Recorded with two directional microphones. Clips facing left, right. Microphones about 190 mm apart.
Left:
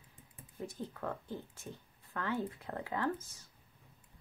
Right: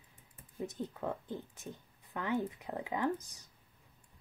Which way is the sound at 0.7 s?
20° right (ahead or behind).